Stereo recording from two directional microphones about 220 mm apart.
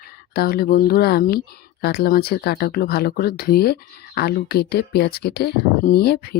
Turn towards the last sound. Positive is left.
turn(degrees=45)  # may be behind; listen again after turning